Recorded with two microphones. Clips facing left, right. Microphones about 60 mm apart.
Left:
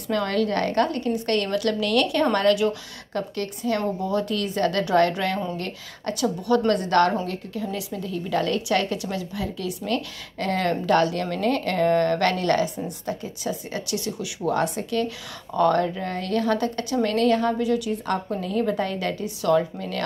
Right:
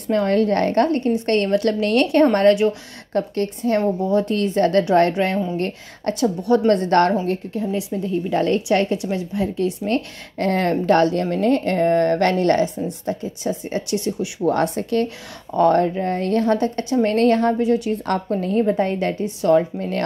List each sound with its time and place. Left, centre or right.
0.1 s a woman's voice: right
3.8 s a woman's voice: right
6.2 s a woman's voice: right
14.5 s speech: right
15.5 s a woman's voice: right